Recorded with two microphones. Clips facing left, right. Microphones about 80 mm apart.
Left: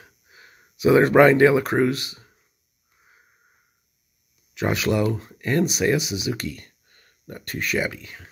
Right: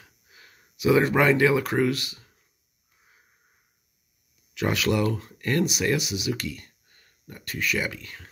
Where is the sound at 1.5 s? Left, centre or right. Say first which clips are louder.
Left 3 dB; left.